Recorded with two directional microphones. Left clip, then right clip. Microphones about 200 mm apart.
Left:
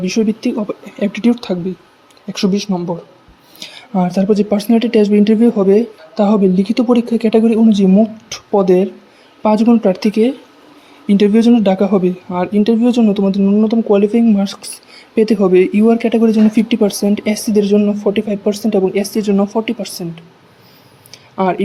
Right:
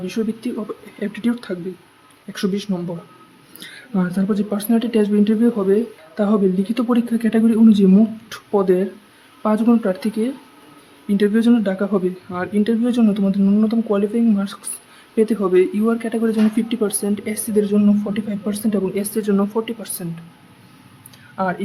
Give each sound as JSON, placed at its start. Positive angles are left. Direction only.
{"t": 0.0, "sound": "speech", "side_deg": 15}